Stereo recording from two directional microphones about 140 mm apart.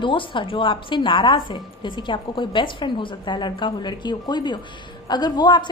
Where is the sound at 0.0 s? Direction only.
35° left (ahead or behind).